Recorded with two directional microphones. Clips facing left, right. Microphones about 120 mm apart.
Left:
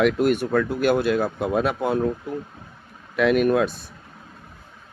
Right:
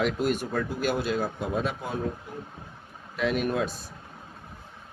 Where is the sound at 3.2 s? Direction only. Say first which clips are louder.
Left 8 dB; 65° left (ahead or behind).